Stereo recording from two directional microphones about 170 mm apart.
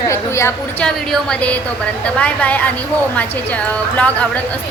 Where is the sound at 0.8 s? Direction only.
5° left (ahead or behind).